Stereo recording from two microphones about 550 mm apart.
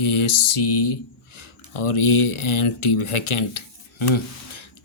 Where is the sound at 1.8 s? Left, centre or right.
Left.